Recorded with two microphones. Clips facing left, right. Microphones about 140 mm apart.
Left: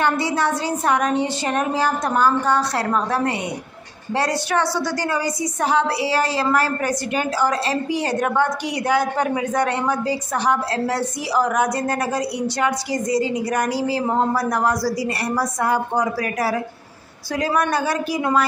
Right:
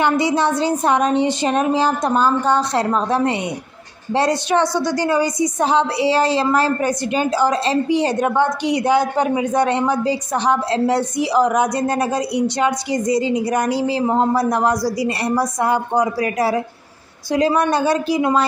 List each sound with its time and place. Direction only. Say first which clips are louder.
0.0 s a woman's voice: right 3 dB; 20° right (ahead or behind)